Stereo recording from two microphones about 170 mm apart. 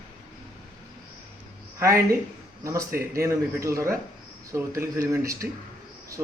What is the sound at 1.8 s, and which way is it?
Speech, 15° right (ahead or behind).